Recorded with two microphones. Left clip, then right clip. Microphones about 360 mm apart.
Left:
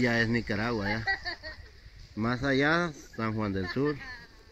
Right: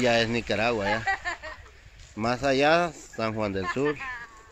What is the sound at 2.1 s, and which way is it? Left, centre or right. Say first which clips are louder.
Speech: right 4 dB; right.